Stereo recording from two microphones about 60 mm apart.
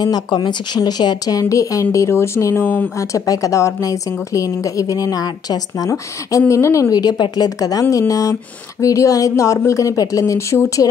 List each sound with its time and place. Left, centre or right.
0.7 s speech: left
3.0 s a woman's voice: left
5.9 s a woman's voice: left
8.1 s a woman's voice: left